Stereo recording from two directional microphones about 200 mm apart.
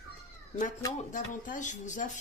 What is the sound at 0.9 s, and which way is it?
Speech, 40° left (ahead or behind).